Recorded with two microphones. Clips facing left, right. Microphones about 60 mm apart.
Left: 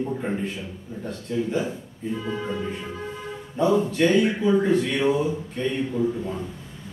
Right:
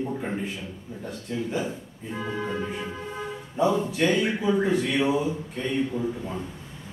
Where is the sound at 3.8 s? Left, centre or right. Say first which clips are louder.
Left 4 dB; centre.